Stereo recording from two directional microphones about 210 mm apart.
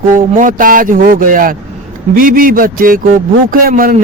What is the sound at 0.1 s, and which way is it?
Speech, 40° right (ahead or behind).